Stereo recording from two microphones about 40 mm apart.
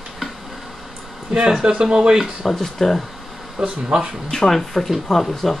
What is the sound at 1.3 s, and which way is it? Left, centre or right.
Speech, centre.